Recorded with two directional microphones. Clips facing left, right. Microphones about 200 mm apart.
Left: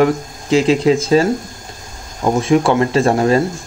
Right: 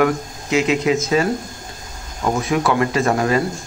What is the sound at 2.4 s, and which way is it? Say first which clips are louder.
Speech: left 6 dB; 30° left (ahead or behind).